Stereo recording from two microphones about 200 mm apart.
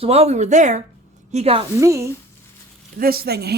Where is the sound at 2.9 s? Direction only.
50° right (ahead or behind).